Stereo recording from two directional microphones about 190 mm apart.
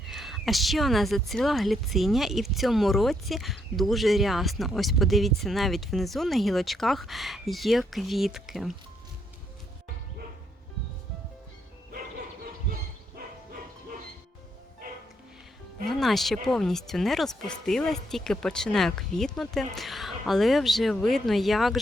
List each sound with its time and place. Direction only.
0.0 s a woman's voice: centre (ahead or behind)
14.8 s music: 45° right (ahead or behind)
15.9 s a woman's voice: centre (ahead or behind)